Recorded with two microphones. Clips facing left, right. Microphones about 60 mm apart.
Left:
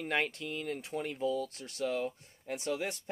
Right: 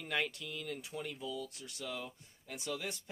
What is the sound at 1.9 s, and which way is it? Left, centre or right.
Speech, left.